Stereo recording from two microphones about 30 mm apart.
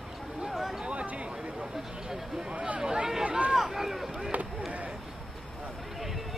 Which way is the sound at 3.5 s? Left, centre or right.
Centre.